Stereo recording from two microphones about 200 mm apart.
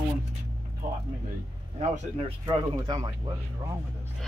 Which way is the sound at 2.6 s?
20° right (ahead or behind).